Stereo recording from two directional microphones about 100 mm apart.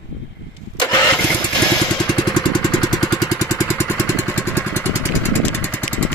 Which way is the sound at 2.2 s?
45° left (ahead or behind).